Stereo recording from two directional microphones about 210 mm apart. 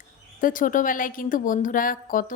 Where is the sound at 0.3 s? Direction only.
40° left (ahead or behind).